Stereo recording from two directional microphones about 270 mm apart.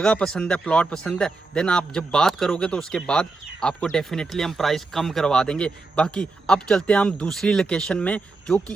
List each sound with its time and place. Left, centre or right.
0.0 s a man's voice: centre